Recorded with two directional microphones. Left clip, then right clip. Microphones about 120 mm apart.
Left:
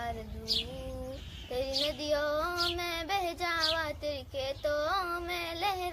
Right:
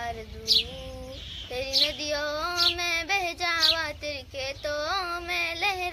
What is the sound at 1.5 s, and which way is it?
Child singing, 30° left (ahead or behind).